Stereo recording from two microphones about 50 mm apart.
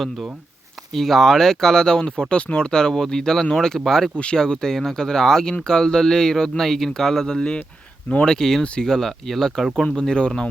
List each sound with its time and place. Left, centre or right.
0.9 s speech: centre
8.6 s speech: left
8.9 s speech: centre